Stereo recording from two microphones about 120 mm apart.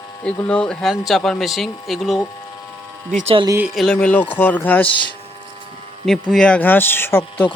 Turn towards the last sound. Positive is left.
turn(degrees=20)  # may be behind; listen again after turning